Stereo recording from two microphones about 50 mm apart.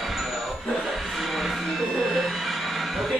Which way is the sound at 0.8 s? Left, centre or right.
Centre.